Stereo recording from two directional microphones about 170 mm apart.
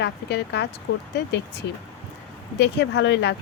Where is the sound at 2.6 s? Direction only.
80° left.